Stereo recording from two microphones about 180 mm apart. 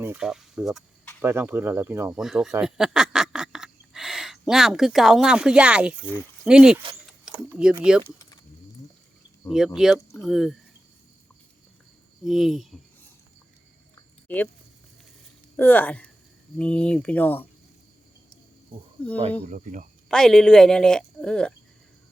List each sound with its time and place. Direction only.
0.0 s a woman's voice: 5° right (ahead or behind)
9.5 s a woman's voice: centre (ahead or behind)
12.2 s a woman's voice: centre (ahead or behind)
14.3 s speech: 10° left (ahead or behind)
15.5 s speech: 10° left (ahead or behind)
19.5 s speech: 45° right (ahead or behind)
20.1 s a woman's voice: 5° left (ahead or behind)